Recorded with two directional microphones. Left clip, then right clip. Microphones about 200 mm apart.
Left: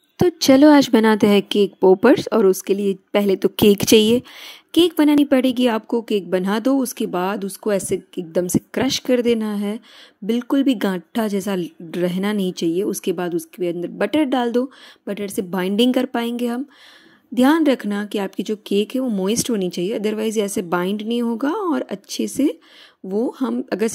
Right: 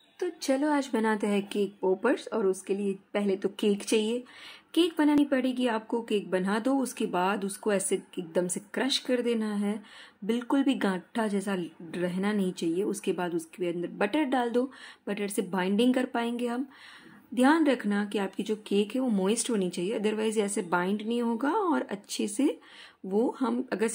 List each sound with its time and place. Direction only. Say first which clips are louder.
0.2 s a woman's voice: left 16 dB; 45° left (ahead or behind)